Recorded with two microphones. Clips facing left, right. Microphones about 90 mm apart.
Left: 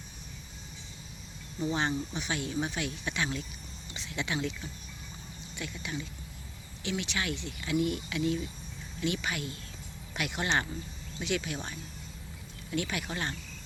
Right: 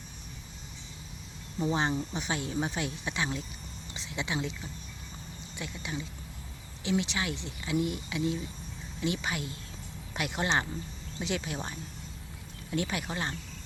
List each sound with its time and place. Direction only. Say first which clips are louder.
1.5 s speech: right 2 dB; 30° right (ahead or behind)
5.5 s speech: even; 25° right (ahead or behind)